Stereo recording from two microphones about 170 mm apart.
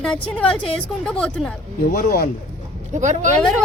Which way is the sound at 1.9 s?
60° left (ahead or behind).